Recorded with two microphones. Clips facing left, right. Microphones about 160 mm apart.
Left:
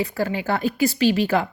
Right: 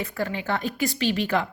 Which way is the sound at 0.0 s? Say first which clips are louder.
Left 5 dB; 35° left (ahead or behind).